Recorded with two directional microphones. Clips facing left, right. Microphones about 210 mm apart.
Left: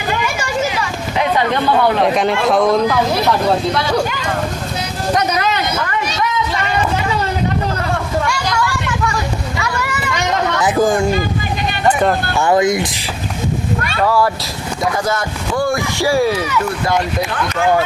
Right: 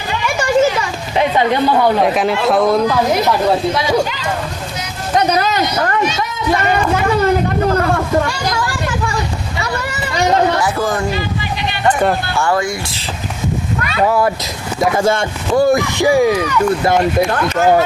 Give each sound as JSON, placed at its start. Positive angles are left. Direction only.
{"t": 2.0, "sound": "speech", "side_deg": 0}
{"t": 5.1, "sound": "a man's voice", "side_deg": -35}
{"t": 8.3, "sound": "children playing", "side_deg": -30}
{"t": 9.6, "sound": "boat", "side_deg": -35}
{"t": 10.6, "sound": "a man's voice", "side_deg": 15}
{"t": 11.9, "sound": "speech", "side_deg": 0}
{"t": 12.4, "sound": "speech", "side_deg": 20}
{"t": 14.0, "sound": "speech", "side_deg": -20}
{"t": 17.2, "sound": "speech", "side_deg": -40}